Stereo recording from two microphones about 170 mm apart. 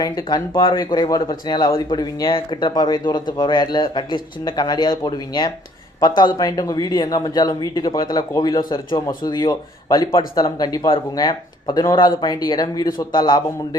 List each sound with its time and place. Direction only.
0.0 s a man's voice: 20° left (ahead or behind)